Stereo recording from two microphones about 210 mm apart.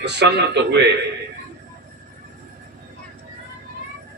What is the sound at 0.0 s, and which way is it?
Speech, 55° right (ahead or behind).